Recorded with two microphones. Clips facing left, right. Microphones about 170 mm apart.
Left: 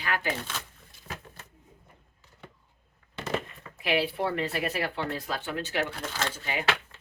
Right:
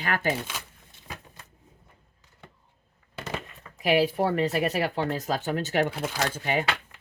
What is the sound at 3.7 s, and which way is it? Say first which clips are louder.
Speech: right 5 dB; 40° right (ahead or behind).